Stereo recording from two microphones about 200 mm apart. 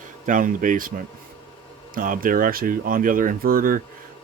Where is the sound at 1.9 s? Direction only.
45° right (ahead or behind).